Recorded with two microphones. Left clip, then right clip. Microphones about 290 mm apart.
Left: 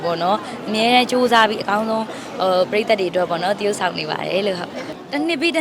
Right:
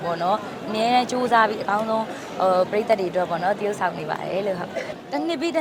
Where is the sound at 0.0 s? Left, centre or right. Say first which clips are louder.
Left 4 dB; left.